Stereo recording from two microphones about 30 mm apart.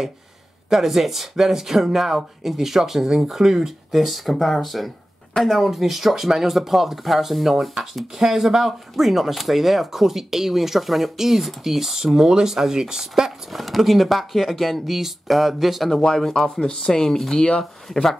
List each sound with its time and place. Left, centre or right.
0.7 s speech: centre
7.8 s speech: centre
13.5 s speech: centre
14.9 s speech: centre
15.9 s speech: centre
16.4 s speech: left
16.9 s speech: centre